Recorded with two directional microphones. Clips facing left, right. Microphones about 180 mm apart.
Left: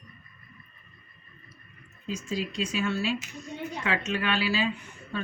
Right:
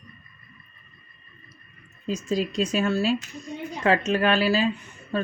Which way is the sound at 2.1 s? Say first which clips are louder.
Right 6 dB; 40° right (ahead or behind).